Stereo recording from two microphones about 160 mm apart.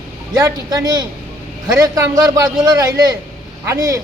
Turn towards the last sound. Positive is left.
turn(degrees=-20)  # may be behind; listen again after turning